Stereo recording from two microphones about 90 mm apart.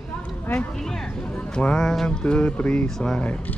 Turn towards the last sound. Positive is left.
turn(degrees=10)  # may be behind; listen again after turning